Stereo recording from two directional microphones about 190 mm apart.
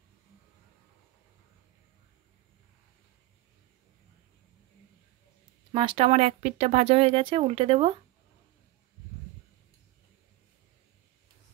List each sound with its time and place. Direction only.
5.7 s speech: 25° right (ahead or behind)